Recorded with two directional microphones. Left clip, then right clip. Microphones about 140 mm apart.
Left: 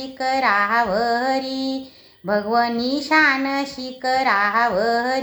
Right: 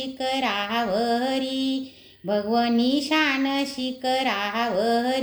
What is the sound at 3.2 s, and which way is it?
A woman's voice, 10° right (ahead or behind).